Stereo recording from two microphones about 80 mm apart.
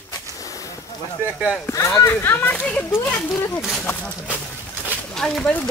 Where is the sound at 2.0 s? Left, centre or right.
Left.